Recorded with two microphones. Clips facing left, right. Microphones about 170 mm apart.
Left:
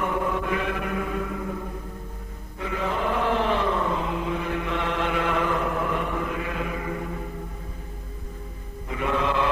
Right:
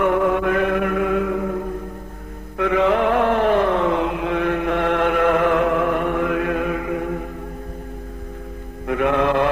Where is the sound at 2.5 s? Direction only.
75° right (ahead or behind); by 5.2 s 55° right (ahead or behind).